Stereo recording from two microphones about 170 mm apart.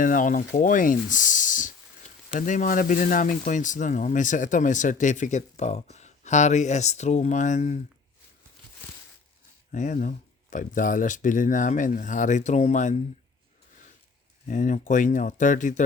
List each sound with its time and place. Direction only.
0.0 s speech: 50° left (ahead or behind)
9.7 s speech: 45° left (ahead or behind)
14.4 s speech: 50° left (ahead or behind)